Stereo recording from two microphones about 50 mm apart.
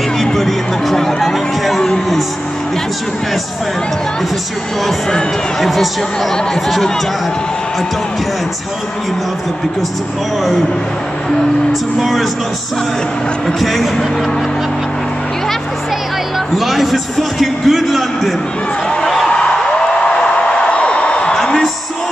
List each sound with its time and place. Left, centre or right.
0.2 s a sound: centre
6.3 s speech: centre
12.0 s a man's voice: centre
13.6 s a man's voice: centre
16.5 s a man's voice: centre
19.0 s a sound: centre